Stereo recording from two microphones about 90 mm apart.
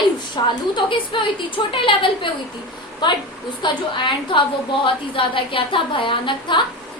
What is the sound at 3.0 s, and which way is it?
Speech, 50° left (ahead or behind).